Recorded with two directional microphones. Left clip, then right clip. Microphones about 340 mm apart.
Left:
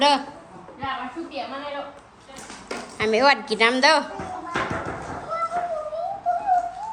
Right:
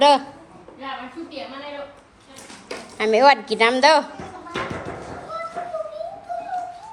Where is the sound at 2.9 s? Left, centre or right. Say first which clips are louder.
Right 4 dB; centre.